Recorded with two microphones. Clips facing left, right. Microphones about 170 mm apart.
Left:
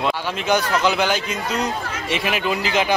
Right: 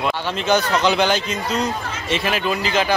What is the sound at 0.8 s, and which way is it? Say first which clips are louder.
A man's voice: right 2 dB; 5° left (ahead or behind).